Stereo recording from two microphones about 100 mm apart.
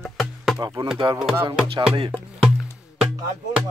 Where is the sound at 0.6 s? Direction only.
50° right (ahead or behind).